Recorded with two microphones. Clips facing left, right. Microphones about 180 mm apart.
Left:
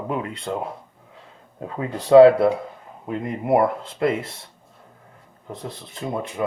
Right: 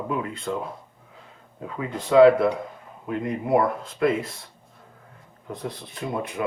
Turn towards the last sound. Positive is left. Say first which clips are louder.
# left 1 dB
turn(degrees=25)  # may be behind; listen again after turning